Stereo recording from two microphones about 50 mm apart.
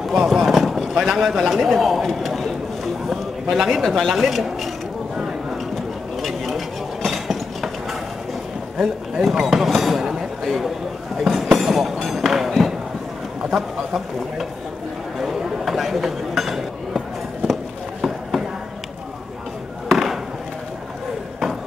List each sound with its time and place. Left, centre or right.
0.0 s clip-clop: centre
4.1 s speech: centre
5.1 s a sound: centre
8.7 s speech: centre
11.1 s a sound: centre
13.5 s speech: centre
15.1 s chatter: centre
19.9 s chop: centre